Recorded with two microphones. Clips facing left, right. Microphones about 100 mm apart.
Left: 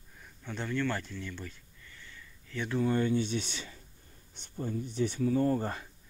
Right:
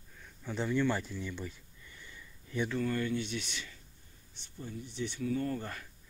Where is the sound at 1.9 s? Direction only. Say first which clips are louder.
Even; 15° right (ahead or behind).